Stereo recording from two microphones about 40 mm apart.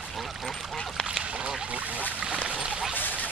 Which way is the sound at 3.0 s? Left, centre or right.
Left.